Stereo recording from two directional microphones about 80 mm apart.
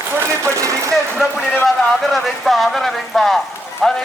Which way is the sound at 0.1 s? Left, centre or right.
Right.